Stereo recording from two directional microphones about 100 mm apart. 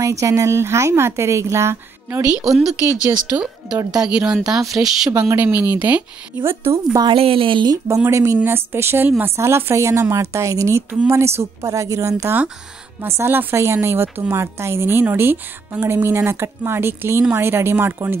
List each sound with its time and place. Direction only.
0.0 s a woman's voice: 30° right (ahead or behind)
2.4 s speech: 5° right (ahead or behind)
5.1 s a woman's voice: 15° right (ahead or behind)
7.1 s a woman's voice: 65° right (ahead or behind)
8.0 s a woman's voice: 30° right (ahead or behind)